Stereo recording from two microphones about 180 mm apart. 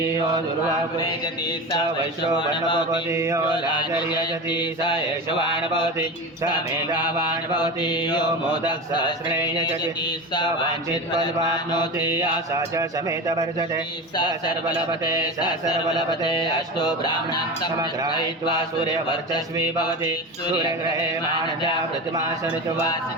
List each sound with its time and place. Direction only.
2.4 s mantra: 25° left (ahead or behind)
3.1 s mantra: 15° right (ahead or behind)
3.7 s mantra: 25° left (ahead or behind)
7.5 s mantra: 25° left (ahead or behind)
11.2 s mantra: 25° left (ahead or behind)
12.5 s speech: 20° right (ahead or behind)
15.2 s mantra: 25° left (ahead or behind)